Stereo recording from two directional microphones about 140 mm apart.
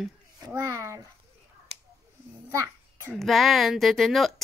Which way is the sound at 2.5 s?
20° right (ahead or behind).